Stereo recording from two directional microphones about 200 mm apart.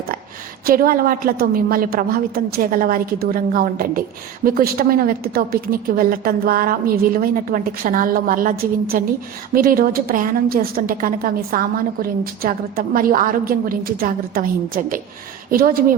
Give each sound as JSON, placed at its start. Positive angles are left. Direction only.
{"t": 0.6, "sound": "a woman's voice", "side_deg": -45}